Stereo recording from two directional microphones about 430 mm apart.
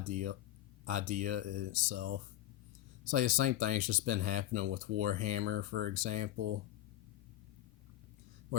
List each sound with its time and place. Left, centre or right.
0.1 s speech: centre